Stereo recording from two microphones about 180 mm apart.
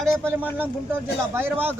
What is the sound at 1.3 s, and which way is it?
Speech, 10° right (ahead or behind).